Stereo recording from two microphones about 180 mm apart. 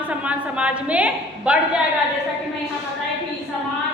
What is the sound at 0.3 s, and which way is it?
A woman's voice, 5° right (ahead or behind).